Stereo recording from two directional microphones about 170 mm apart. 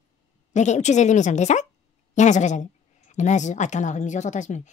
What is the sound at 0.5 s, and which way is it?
A woman's voice, 45° left (ahead or behind).